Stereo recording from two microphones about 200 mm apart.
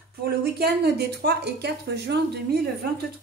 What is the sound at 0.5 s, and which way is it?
Speech, 50° right (ahead or behind).